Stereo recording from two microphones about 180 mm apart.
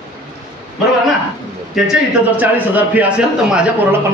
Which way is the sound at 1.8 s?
Centre (ahead or behind).